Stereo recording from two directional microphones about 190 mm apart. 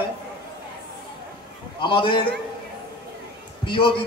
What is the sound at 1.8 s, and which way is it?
Speech, 25° left (ahead or behind).